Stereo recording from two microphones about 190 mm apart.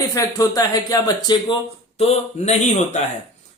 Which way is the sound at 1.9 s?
35° left (ahead or behind).